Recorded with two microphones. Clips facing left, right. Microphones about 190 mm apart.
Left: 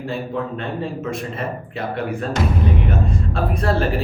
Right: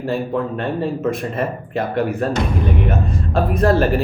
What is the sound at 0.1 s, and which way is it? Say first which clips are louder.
Speech: right 5 dB; 50° right (ahead or behind).